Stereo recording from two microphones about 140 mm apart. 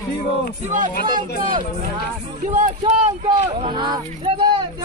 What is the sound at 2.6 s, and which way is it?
Speech, 55° right (ahead or behind).